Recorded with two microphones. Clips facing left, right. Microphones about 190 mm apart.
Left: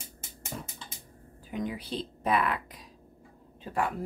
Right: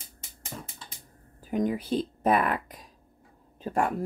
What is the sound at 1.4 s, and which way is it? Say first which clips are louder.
Speech: right 7 dB; 45° right (ahead or behind).